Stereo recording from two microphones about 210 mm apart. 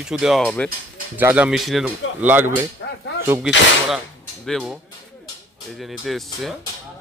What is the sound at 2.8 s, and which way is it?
Speech, 55° left (ahead or behind).